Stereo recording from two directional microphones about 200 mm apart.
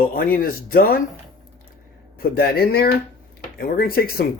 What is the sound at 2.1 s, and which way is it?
A man's voice, 50° left (ahead or behind).